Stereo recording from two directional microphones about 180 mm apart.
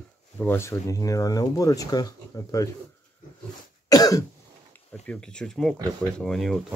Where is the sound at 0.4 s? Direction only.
15° left (ahead or behind).